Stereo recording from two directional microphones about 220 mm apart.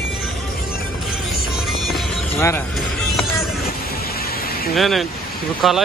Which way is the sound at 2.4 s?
10° left (ahead or behind).